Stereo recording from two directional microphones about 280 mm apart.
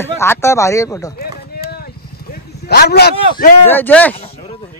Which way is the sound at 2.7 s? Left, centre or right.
Left.